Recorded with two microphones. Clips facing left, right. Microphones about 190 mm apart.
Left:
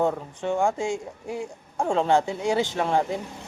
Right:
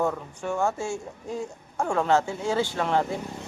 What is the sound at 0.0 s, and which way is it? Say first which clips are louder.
Speech: left 3 dB; 20° left (ahead or behind).